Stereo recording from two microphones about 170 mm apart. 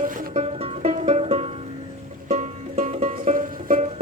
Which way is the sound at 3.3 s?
55° right (ahead or behind).